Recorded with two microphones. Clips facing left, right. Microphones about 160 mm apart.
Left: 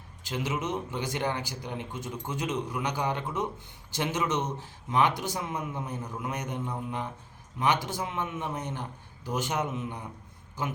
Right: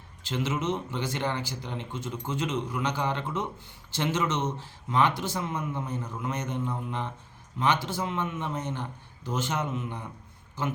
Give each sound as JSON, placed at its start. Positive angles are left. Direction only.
{"t": 0.2, "sound": "a man's voice", "side_deg": 15}